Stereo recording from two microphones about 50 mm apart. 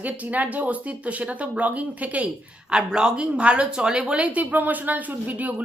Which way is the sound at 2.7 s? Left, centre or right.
Centre.